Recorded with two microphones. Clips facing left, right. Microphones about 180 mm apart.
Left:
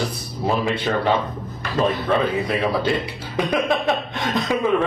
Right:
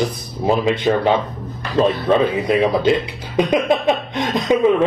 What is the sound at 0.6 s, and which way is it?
A man's voice, 20° right (ahead or behind).